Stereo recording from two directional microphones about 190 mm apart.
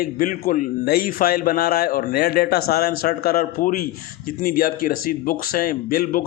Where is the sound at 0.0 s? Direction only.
50° left (ahead or behind).